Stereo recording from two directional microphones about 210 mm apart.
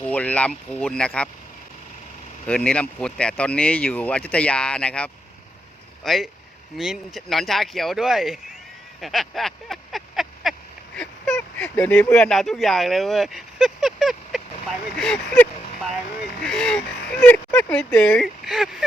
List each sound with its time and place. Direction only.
0.0 s speech: 5° left (ahead or behind)
2.5 s speech: 5° left (ahead or behind)
9.0 s a sound: centre (ahead or behind)
10.9 s speech: 5° left (ahead or behind)